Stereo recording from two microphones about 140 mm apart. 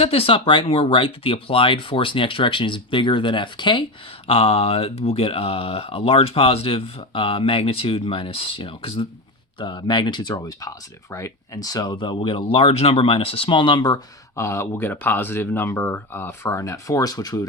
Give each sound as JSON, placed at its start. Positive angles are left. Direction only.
{"t": 0.0, "sound": "speech", "side_deg": 45}